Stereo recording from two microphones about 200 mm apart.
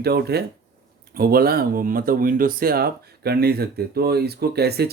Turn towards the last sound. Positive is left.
turn(degrees=-55)  # may be behind; listen again after turning